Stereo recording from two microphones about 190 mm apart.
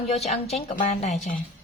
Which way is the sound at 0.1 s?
35° left (ahead or behind).